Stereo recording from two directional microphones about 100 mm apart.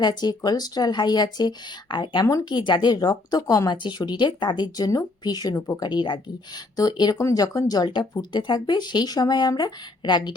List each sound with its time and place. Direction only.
0.0 s speech: 45° left (ahead or behind)
3.7 s speech: 45° left (ahead or behind)
7.2 s speech: 35° left (ahead or behind); by 10.3 s 50° left (ahead or behind)